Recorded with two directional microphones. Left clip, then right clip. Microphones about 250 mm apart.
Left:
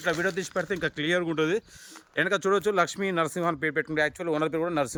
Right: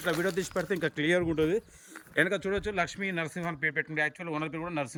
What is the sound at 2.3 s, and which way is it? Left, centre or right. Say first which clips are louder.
Speech: left 7 dB; centre.